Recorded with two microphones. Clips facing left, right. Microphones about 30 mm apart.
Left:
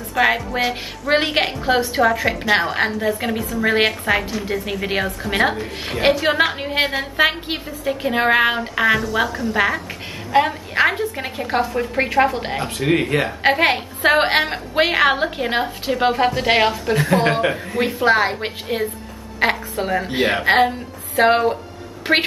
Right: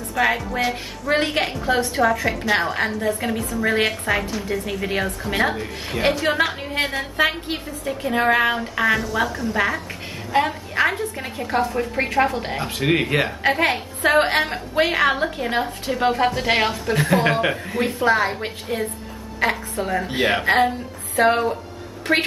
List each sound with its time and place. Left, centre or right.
0.1 s a woman's voice: centre
1.3 s a woman's voice: left
11.6 s a woman's voice: centre
12.6 s speech: centre
13.4 s a woman's voice: left; by 17.6 s centre
18.0 s a woman's voice: left
19.4 s a woman's voice: left
19.9 s a woman's voice: centre
21.2 s a woman's voice: left